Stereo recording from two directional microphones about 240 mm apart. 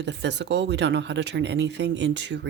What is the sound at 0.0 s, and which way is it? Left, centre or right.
Speech, right.